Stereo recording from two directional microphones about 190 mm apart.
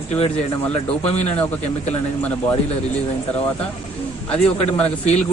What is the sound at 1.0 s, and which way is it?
Speech, 35° left (ahead or behind).